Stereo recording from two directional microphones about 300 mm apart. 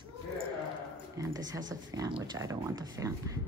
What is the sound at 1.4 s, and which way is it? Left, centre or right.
Speech, centre.